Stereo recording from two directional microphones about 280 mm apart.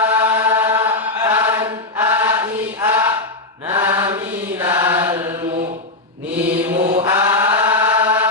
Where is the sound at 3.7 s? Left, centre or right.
Centre.